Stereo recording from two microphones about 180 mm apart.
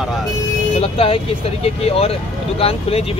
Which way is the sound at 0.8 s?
35° left (ahead or behind).